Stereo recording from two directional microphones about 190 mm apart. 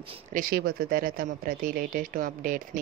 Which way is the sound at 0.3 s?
50° right (ahead or behind).